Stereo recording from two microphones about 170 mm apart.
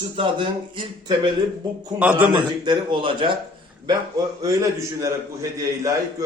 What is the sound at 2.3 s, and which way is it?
A man's voice, 25° right (ahead or behind).